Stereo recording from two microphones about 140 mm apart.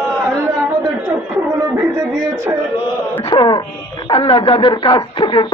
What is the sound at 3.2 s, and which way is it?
Speech, 35° left (ahead or behind).